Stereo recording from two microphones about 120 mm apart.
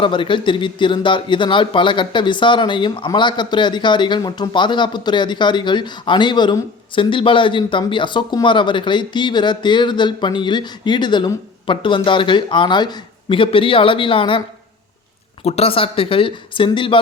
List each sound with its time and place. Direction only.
0.0 s speech: 45° left (ahead or behind)
15.4 s speech: 55° left (ahead or behind)